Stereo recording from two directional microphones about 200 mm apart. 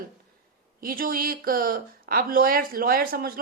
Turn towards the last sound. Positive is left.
turn(degrees=-45)  # may be behind; listen again after turning